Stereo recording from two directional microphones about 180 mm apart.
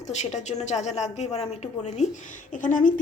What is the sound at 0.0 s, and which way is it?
A woman's voice, 40° left (ahead or behind).